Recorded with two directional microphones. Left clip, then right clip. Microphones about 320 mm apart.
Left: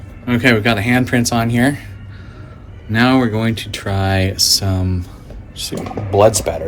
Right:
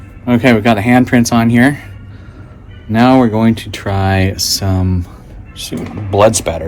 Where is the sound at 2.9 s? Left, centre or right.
Centre; by 6.6 s right.